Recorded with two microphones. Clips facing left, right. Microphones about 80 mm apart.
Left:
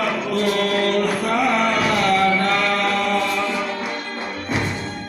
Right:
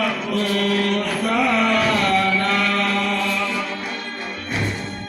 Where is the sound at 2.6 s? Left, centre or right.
Left.